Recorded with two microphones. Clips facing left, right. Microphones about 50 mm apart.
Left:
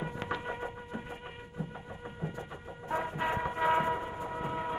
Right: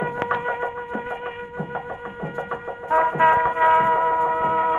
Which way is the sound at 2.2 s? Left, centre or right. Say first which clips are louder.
Right 13 dB; right.